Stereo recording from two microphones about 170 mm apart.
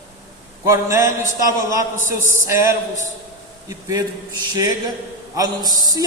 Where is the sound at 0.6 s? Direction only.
15° right (ahead or behind).